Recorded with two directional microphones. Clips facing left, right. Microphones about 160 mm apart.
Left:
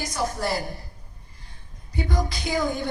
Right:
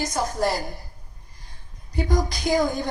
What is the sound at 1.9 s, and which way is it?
Speech, 40° right (ahead or behind).